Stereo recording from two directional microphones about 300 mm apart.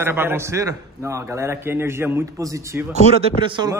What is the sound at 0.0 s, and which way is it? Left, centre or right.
A man's voice, centre.